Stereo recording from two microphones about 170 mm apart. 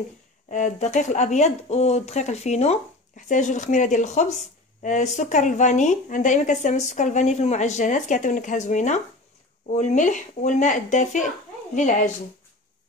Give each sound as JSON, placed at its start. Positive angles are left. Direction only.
{"t": 0.5, "sound": "a woman's voice", "side_deg": 45}